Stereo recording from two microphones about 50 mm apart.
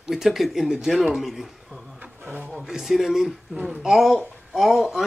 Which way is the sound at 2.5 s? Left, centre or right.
Centre.